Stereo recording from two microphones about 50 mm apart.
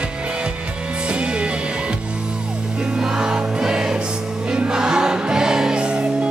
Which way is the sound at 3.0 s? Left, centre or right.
Centre.